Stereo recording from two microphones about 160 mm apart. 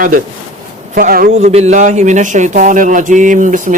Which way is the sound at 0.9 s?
65° right (ahead or behind).